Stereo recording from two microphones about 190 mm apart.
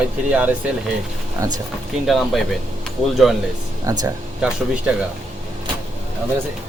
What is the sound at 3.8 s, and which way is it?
Speech, 20° right (ahead or behind).